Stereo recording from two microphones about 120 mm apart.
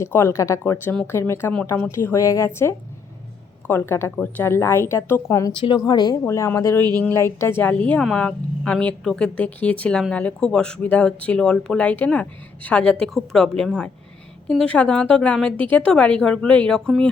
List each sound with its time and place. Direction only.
0.0 s speech: 20° left (ahead or behind)
5.5 s a woman's voice: 40° left (ahead or behind)
6.2 s speech: 25° left (ahead or behind); by 17.1 s 5° left (ahead or behind)